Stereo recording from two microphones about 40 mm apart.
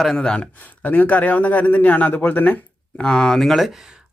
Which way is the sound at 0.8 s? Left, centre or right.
Left.